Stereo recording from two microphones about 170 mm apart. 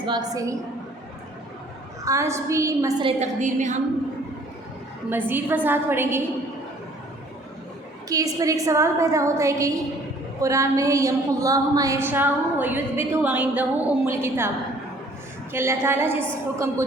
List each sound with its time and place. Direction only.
0.0 s a woman's voice: 25° right (ahead or behind)
2.0 s a woman's voice: 15° right (ahead or behind)
3.0 s a woman's voice: 35° right (ahead or behind)
3.4 s a woman's voice: 45° right (ahead or behind)
5.3 s a woman's voice: 10° right (ahead or behind)
8.1 s a woman's voice: 20° right (ahead or behind)
15.5 s a woman's voice: 15° right (ahead or behind)